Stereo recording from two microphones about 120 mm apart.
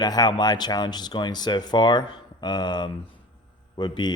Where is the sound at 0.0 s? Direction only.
35° left (ahead or behind).